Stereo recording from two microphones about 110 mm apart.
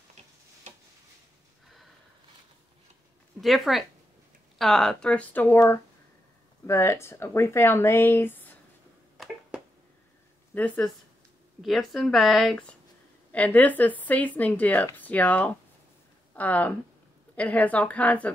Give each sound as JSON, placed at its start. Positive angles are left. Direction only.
{"t": 0.7, "sound": "a sound", "side_deg": -90}
{"t": 3.3, "sound": "a woman's voice", "side_deg": 0}
{"t": 6.6, "sound": "speech", "side_deg": 25}
{"t": 9.2, "sound": "a sound", "side_deg": 0}
{"t": 10.5, "sound": "speech", "side_deg": 15}
{"t": 11.6, "sound": "a woman's voice", "side_deg": 0}
{"t": 13.3, "sound": "a woman's voice", "side_deg": 15}